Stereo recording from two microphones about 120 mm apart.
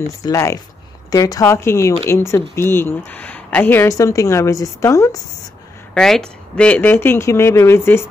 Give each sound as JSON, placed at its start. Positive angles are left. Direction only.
{"t": 0.0, "sound": "speech", "side_deg": 25}
{"t": 5.9, "sound": "speech", "side_deg": 5}